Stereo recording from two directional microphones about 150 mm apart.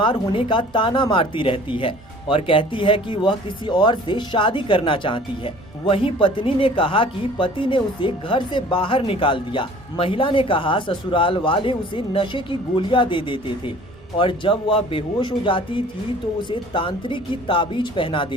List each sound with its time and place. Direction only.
0.0 s speech: 35° left (ahead or behind)